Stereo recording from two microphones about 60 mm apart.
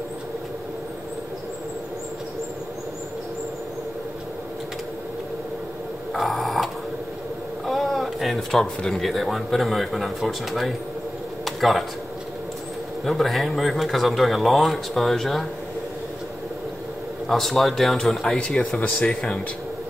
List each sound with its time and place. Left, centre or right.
6.1 s dog: centre
7.6 s speech: centre
11.4 s a sound: centre
13.0 s speech: centre
17.3 s speech: centre
18.8 s speech: centre